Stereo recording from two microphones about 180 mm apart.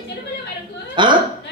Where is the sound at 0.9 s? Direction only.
25° right (ahead or behind).